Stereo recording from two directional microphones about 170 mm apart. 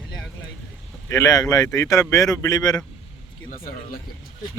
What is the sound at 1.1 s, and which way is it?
Speech, 20° left (ahead or behind).